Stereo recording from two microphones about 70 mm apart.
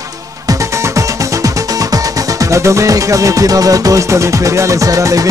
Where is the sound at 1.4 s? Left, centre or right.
Right.